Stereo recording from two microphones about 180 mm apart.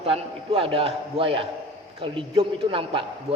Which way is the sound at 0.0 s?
30° right (ahead or behind).